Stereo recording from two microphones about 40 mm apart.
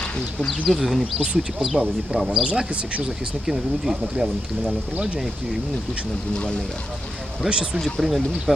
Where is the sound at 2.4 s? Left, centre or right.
Right.